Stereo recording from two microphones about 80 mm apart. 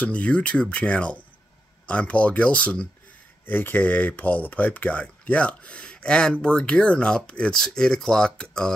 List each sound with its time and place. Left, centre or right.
0.0 s speech: centre